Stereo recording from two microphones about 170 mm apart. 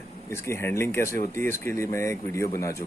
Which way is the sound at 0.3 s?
15° left (ahead or behind).